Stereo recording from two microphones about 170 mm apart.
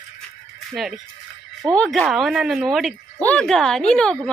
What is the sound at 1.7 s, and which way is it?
Speech, 5° left (ahead or behind).